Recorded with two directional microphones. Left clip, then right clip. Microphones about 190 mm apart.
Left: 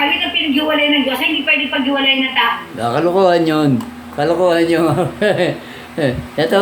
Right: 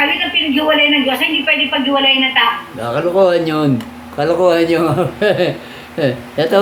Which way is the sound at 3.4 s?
15° left (ahead or behind).